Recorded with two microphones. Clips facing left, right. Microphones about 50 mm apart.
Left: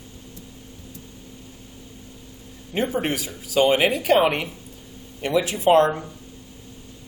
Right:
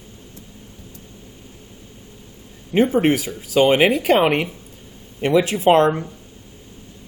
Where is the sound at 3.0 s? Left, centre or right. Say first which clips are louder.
Right 8 dB; right.